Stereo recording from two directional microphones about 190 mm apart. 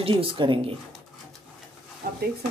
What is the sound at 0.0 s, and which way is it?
Speech, 25° right (ahead or behind).